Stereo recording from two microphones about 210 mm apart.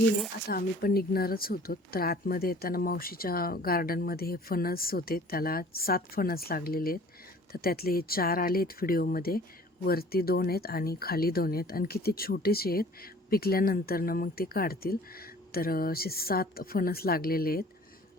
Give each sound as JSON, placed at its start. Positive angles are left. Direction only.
{"t": 0.4, "sound": "speech", "side_deg": 45}